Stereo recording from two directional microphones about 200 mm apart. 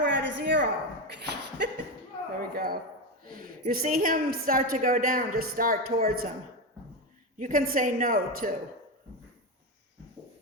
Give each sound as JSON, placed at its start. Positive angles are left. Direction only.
{"t": 0.0, "sound": "a sound", "side_deg": -65}
{"t": 2.4, "sound": "speech", "side_deg": -45}
{"t": 7.3, "sound": "speech", "side_deg": -45}